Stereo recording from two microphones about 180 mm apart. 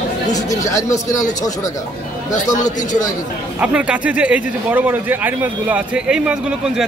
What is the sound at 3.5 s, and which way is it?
Speech, 5° right (ahead or behind).